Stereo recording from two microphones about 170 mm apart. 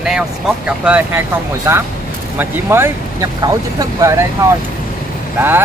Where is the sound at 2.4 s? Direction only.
15° right (ahead or behind).